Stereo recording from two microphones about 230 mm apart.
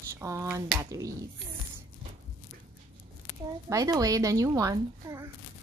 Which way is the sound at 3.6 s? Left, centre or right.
Centre.